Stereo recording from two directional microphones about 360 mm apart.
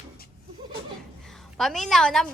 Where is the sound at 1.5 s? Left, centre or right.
Centre.